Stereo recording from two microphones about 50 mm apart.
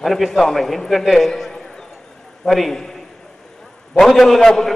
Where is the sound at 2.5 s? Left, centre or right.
Centre.